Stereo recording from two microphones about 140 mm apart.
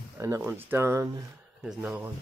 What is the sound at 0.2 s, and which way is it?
Speech, 15° right (ahead or behind).